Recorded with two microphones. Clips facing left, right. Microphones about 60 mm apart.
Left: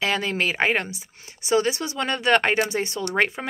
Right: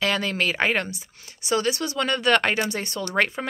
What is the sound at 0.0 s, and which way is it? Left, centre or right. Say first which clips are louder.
Speech: even; centre.